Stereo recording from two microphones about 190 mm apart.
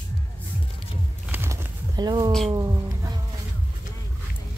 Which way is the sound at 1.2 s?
10° right (ahead or behind).